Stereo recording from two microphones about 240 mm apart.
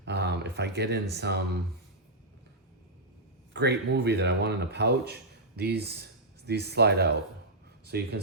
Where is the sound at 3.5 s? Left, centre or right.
Right.